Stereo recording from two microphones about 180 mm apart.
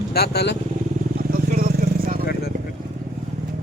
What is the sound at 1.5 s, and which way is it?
Vehicle, 55° right (ahead or behind).